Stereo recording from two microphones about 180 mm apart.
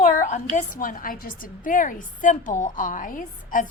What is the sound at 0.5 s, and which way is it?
A woman's voice, 50° left (ahead or behind).